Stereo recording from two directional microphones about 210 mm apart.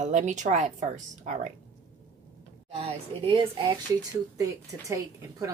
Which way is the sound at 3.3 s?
20° right (ahead or behind).